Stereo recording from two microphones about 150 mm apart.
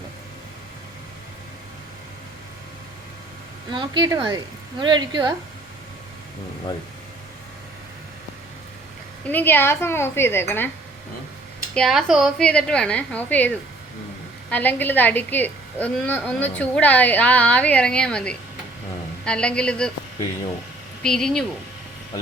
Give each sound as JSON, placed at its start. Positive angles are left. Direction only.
{"t": 3.7, "sound": "speech", "side_deg": -30}
{"t": 9.2, "sound": "a woman's voice", "side_deg": 15}
{"t": 11.7, "sound": "a woman's voice", "side_deg": 0}
{"t": 14.5, "sound": "a woman's voice", "side_deg": 10}
{"t": 21.0, "sound": "speech", "side_deg": 5}